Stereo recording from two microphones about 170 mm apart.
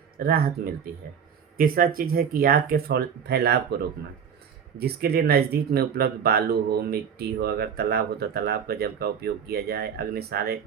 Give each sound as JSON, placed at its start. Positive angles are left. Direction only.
{"t": 0.2, "sound": "speech", "side_deg": -60}